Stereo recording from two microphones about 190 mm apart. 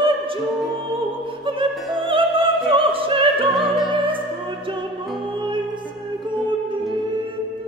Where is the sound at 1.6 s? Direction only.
25° right (ahead or behind).